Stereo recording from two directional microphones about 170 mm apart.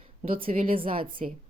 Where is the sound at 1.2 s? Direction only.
45° right (ahead or behind).